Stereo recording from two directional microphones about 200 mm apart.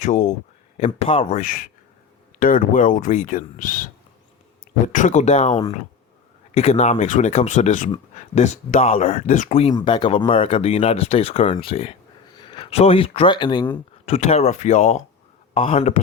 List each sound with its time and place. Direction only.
0.0 s speech: 40° left (ahead or behind)
4.9 s speech: 40° left (ahead or behind); by 13.7 s 20° left (ahead or behind)
14.0 s speech: 35° left (ahead or behind)